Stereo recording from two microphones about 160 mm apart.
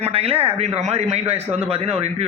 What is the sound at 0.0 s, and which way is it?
A man's voice, 40° right (ahead or behind).